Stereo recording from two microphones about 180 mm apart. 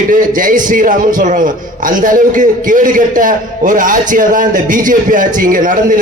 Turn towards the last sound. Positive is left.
turn(degrees=-50)  # may be behind; listen again after turning